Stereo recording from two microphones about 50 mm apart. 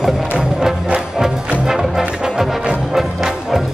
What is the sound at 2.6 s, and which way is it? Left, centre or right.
Music, right.